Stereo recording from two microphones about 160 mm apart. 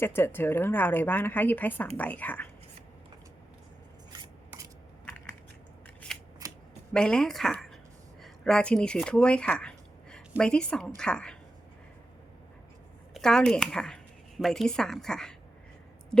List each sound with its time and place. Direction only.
0.0 s a woman's voice: 15° left (ahead or behind)
4.2 s scissors: 20° right (ahead or behind)
6.4 s scissors: 20° right (ahead or behind)
6.9 s speech: 5° left (ahead or behind)
13.1 s a woman's voice: 5° left (ahead or behind)